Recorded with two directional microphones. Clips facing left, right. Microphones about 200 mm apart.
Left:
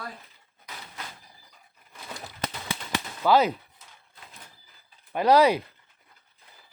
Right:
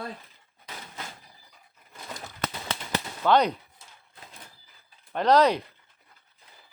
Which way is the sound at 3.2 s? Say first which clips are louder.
Left 1 dB; 5° left (ahead or behind).